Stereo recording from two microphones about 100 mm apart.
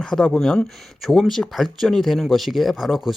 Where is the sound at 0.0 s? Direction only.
5° left (ahead or behind).